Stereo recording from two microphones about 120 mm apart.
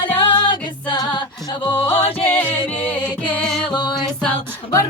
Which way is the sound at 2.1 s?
50° left (ahead or behind).